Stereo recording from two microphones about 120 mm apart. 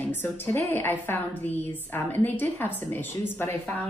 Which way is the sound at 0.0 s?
15° left (ahead or behind).